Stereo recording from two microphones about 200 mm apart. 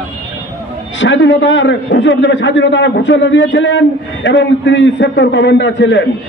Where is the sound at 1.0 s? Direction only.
65° left (ahead or behind).